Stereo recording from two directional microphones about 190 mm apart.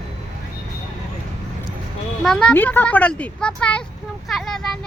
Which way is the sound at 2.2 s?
5° left (ahead or behind).